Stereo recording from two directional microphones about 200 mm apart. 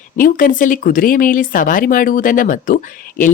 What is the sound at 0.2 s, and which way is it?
Speech, 45° left (ahead or behind).